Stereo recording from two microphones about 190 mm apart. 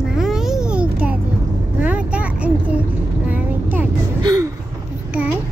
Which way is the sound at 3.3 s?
10° right (ahead or behind).